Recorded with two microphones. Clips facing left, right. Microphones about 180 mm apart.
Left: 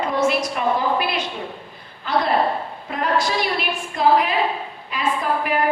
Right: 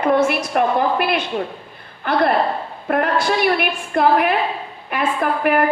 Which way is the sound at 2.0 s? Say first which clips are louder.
Right 2 dB; 60° right (ahead or behind).